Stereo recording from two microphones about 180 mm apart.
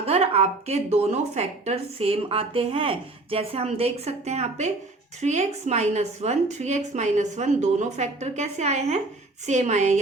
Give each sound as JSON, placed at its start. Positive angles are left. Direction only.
{"t": 0.0, "sound": "speech", "side_deg": -35}